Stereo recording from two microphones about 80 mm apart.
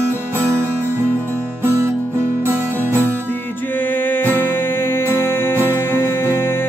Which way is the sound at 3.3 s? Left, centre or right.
Left.